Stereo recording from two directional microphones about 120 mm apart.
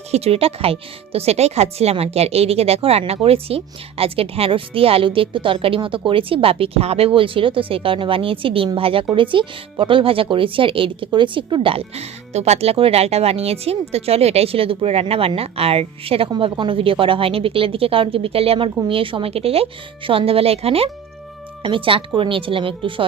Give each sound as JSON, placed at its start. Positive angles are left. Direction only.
{"t": 0.1, "sound": "speech", "side_deg": -55}